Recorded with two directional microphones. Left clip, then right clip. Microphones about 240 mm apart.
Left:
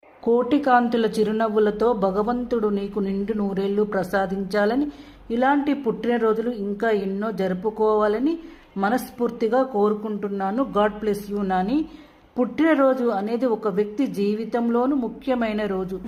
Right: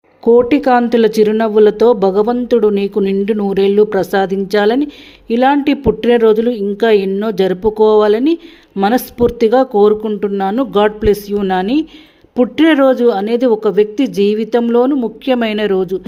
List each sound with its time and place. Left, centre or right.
0.3 s speech: right